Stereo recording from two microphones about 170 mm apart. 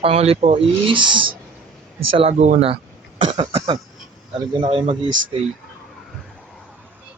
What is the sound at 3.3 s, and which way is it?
Speech, 25° right (ahead or behind).